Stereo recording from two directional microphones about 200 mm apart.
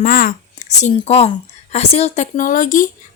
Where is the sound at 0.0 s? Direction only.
45° left (ahead or behind).